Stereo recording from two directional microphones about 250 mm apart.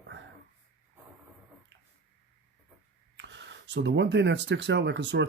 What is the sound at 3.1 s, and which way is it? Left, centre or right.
Speech, right.